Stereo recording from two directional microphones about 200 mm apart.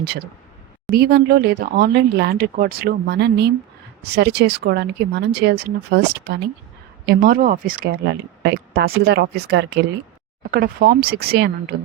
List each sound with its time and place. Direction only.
0.9 s speech: 50° right (ahead or behind)